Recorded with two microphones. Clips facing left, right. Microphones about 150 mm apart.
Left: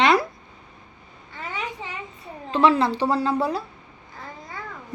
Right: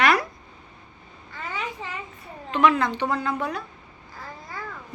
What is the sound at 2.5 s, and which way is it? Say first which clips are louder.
A woman's voice: left 2 dB; 30° left (ahead or behind).